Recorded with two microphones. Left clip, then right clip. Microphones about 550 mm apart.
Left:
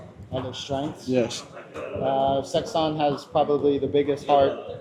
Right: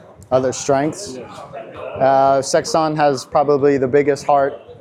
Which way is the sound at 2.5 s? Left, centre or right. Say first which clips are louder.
Right 9 dB; right.